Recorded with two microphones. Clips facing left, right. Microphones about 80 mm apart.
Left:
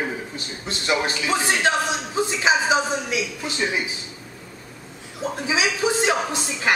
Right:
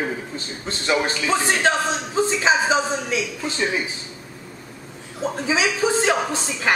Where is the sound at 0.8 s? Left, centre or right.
Centre.